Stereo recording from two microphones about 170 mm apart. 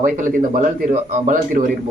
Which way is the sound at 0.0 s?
55° right (ahead or behind).